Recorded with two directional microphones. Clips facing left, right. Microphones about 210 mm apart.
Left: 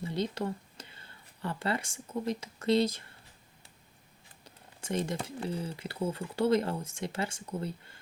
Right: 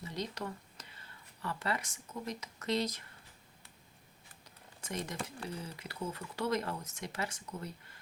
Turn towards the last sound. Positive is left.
turn(degrees=30)  # may be behind; listen again after turning